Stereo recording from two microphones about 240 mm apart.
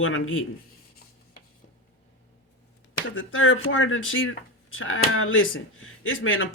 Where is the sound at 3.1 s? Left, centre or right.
Left.